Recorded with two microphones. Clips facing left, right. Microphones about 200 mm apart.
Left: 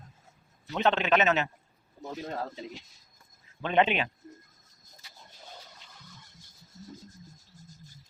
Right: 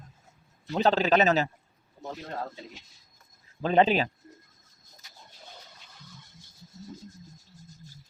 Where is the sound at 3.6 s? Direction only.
35° right (ahead or behind).